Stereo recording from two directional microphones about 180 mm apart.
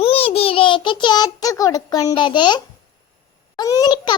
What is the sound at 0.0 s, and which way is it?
Child singing, 30° left (ahead or behind).